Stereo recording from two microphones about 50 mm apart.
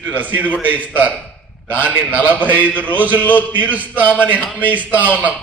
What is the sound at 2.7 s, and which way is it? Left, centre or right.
Speech, left.